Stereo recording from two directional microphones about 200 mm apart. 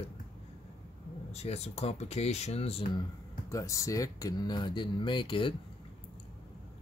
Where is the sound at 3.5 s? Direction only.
15° left (ahead or behind).